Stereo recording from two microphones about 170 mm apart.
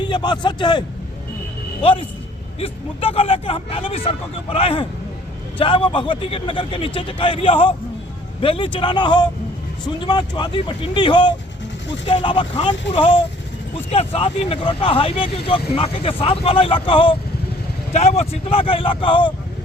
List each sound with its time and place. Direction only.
0.0 s speech: 25° left (ahead or behind)